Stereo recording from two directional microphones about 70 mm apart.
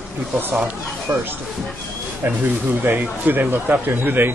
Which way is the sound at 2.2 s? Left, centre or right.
Right.